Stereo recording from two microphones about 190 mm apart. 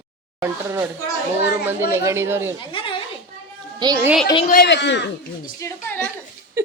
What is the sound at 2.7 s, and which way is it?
Children playing, 30° left (ahead or behind).